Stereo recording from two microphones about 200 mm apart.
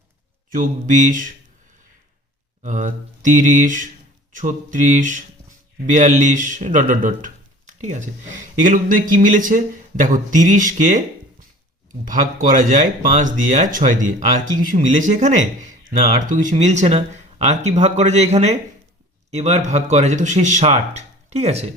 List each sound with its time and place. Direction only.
0.5 s speech: 40° right (ahead or behind)
2.6 s speech: 40° right (ahead or behind)
7.7 s a sound: 35° right (ahead or behind)
8.6 s speech: 40° right (ahead or behind)
12.0 s speech: 40° right (ahead or behind)